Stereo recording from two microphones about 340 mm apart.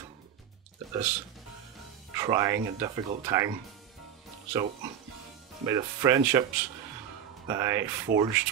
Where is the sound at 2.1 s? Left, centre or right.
Centre.